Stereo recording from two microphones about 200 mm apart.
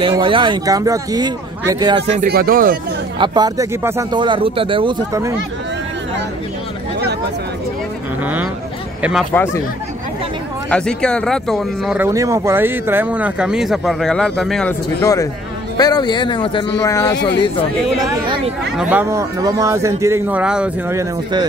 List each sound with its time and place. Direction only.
0.0 s speech: 25° right (ahead or behind)
2.2 s speech: 50° right (ahead or behind)
3.2 s speech: 20° right (ahead or behind)
4.2 s speech: 25° right (ahead or behind)
8.2 s speech: 10° right (ahead or behind)
9.3 s speech: 10° left (ahead or behind)
10.7 s speech: 5° left (ahead or behind)
12.0 s speech: 15° right (ahead or behind); by 17.2 s 15° left (ahead or behind)
18.8 s speech: 10° right (ahead or behind)